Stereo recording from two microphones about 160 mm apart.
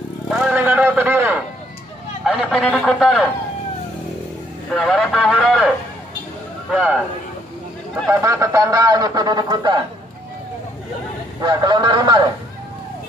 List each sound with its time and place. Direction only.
0.3 s vehicle: 5° right (ahead or behind)
2.2 s a man's voice: centre (ahead or behind)
4.7 s a man's voice: 5° left (ahead or behind)
6.7 s a man's voice: 5° right (ahead or behind)
8.1 s a man's voice: 20° right (ahead or behind)
11.4 s a man's voice: 30° right (ahead or behind)